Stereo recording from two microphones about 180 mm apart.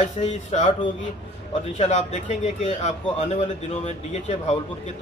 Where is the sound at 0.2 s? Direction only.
40° left (ahead or behind).